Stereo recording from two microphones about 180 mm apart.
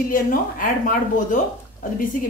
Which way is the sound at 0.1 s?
50° left (ahead or behind).